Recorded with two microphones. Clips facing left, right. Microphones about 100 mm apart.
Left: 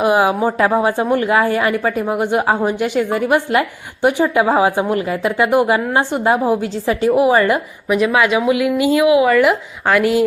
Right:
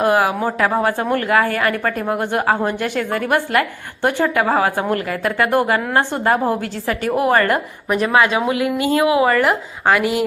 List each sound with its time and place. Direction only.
0.0 s a woman's voice: 15° left (ahead or behind)
8.1 s speech: 30° right (ahead or behind)
8.8 s a woman's voice: 20° left (ahead or behind)
9.2 s speech: centre (ahead or behind)
9.8 s speech: 10° right (ahead or behind)